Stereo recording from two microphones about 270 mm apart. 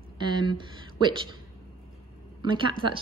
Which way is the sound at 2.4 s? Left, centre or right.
Centre.